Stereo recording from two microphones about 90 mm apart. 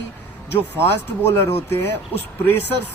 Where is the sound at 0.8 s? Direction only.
25° left (ahead or behind).